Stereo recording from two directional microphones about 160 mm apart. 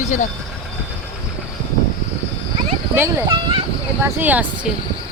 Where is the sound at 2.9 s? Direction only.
15° right (ahead or behind).